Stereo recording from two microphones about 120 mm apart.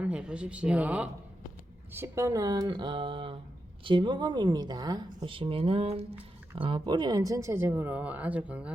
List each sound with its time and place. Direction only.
0.0 s speech: 10° right (ahead or behind)
1.9 s speech: 20° right (ahead or behind); by 6.0 s 55° right (ahead or behind)
6.6 s speech: 45° right (ahead or behind); by 8.7 s 10° right (ahead or behind)